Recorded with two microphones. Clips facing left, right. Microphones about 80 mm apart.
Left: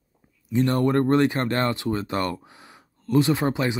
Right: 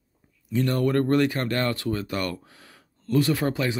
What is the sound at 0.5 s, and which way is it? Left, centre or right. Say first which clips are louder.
Speech: left 2 dB; left.